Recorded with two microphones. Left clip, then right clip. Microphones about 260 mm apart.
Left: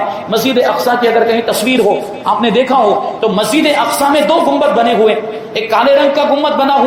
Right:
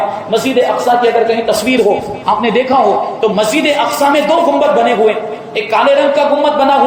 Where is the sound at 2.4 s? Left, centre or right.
Centre.